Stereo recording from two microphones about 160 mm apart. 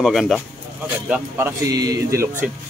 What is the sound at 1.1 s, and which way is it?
Speech, 15° right (ahead or behind).